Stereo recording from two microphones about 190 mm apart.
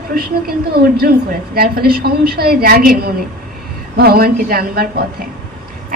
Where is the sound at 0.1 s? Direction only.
50° right (ahead or behind).